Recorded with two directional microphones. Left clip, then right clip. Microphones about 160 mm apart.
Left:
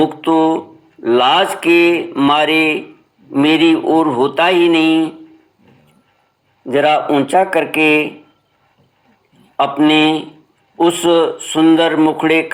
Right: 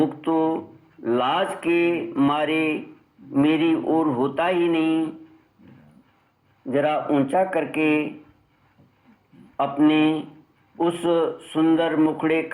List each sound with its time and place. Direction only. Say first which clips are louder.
0.0 s speech: left 9 dB; 30° left (ahead or behind)
6.7 s speech: left 9 dB; 30° left (ahead or behind)
9.6 s speech: left 8 dB; 30° left (ahead or behind)